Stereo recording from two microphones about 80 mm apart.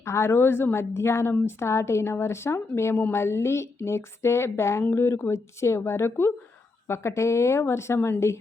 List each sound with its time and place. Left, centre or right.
0.0 s a woman's voice: left